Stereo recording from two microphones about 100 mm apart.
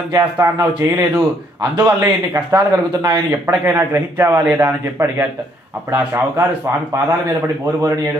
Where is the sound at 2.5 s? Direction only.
40° right (ahead or behind).